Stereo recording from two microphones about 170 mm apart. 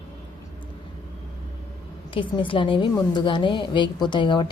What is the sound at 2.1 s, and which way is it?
A woman's voice, 30° left (ahead or behind).